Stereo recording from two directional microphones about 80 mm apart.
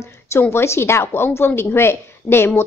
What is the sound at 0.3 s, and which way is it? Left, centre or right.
A woman's voice, left.